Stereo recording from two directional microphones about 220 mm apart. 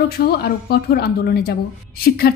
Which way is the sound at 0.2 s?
45° left (ahead or behind).